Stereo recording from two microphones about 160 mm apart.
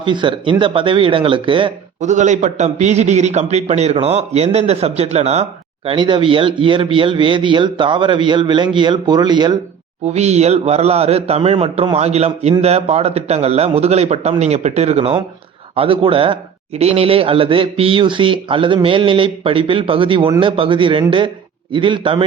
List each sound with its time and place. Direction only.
0.0 s a man's voice: 30° right (ahead or behind)
2.0 s a man's voice: 50° right (ahead or behind); by 9.6 s 25° right (ahead or behind)
10.1 s a man's voice: 45° right (ahead or behind)